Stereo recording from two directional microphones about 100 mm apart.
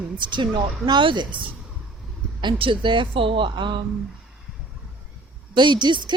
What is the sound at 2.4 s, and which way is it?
A woman's voice, 55° right (ahead or behind).